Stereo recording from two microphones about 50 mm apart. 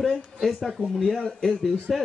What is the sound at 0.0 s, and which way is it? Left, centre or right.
Speech, centre.